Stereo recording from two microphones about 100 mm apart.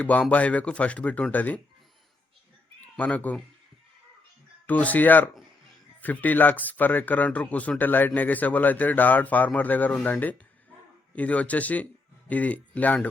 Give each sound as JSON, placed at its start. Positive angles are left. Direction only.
{"t": 0.0, "sound": "speech", "side_deg": 15}
{"t": 3.0, "sound": "speech", "side_deg": 15}
{"t": 4.6, "sound": "speech", "side_deg": 15}